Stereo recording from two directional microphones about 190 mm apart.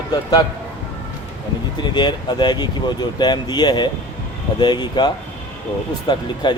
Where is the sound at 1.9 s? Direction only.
25° left (ahead or behind).